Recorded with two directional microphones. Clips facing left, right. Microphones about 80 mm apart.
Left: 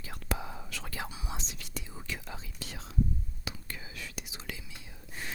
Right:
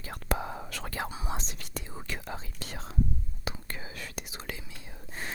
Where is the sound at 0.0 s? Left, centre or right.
Right.